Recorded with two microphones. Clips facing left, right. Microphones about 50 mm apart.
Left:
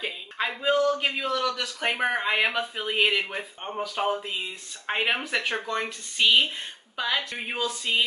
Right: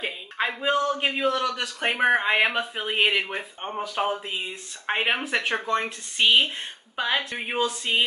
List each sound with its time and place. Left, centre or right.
0.0 s a sound: centre
1.0 s speech: centre
3.7 s speech: centre
6.1 s speech: right